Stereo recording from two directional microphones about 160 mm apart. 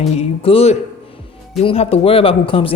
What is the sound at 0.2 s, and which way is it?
A man's voice, 40° left (ahead or behind).